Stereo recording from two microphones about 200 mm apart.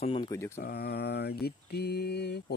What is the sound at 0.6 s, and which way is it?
Mantra, 50° left (ahead or behind).